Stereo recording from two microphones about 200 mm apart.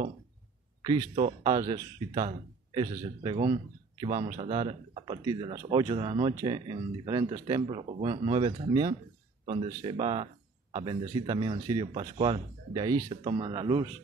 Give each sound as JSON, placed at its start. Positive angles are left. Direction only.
{"t": 1.4, "sound": "speech", "side_deg": -20}